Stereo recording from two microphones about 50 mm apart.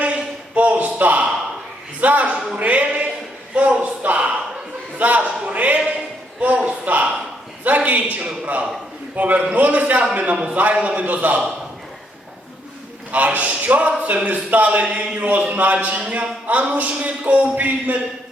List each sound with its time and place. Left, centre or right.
0.0 s a sound: right
2.0 s speech: right
13.1 s speech: right